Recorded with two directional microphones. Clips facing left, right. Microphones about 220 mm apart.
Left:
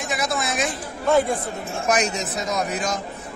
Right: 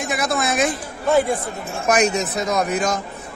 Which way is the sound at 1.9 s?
55° right (ahead or behind).